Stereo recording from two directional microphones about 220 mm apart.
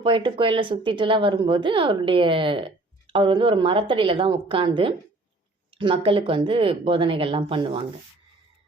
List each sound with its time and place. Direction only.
0.0 s a woman's voice: 25° right (ahead or behind)